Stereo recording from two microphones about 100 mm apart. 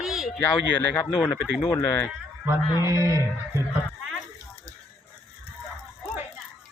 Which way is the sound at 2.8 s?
30° right (ahead or behind).